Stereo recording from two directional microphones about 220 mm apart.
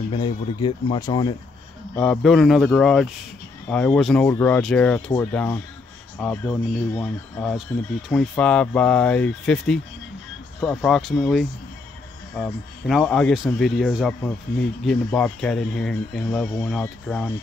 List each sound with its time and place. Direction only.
0.1 s speech: 25° left (ahead or behind)
2.0 s speech: 5° left (ahead or behind)